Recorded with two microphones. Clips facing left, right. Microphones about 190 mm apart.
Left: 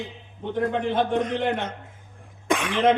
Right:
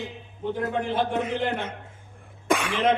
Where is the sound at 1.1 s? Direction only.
5° right (ahead or behind).